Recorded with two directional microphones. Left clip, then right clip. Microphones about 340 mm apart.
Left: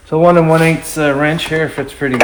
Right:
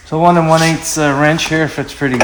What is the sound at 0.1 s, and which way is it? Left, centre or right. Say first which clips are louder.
Speech: left 1 dB; centre.